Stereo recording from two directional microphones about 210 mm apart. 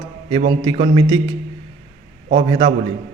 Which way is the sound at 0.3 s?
25° right (ahead or behind).